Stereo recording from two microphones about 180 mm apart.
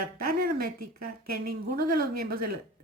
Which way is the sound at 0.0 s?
55° right (ahead or behind).